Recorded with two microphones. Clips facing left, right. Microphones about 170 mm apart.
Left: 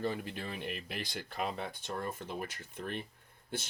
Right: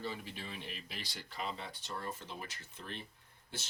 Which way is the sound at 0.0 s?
55° left (ahead or behind).